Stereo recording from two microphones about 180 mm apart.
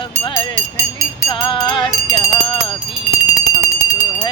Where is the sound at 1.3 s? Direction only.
25° left (ahead or behind).